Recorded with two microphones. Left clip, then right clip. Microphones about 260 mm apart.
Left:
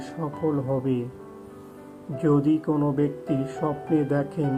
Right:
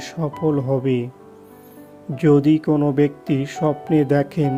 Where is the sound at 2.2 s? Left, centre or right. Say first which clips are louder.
Right 7 dB; right.